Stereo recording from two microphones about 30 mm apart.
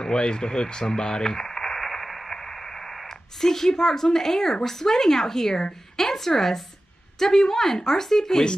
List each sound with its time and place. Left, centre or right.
0.0 s speech: left
1.2 s radio: centre
1.8 s radio: centre
2.3 s a woman's voice: centre